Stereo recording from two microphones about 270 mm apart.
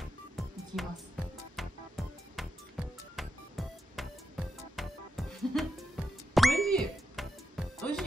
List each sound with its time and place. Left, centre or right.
0.0 s music: centre